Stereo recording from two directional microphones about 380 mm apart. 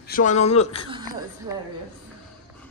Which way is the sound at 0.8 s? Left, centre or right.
Centre.